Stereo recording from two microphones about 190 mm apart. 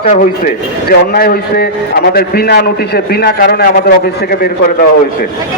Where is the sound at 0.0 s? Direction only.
50° left (ahead or behind).